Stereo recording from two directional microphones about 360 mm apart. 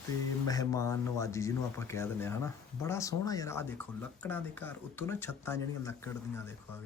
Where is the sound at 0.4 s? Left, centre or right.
Centre.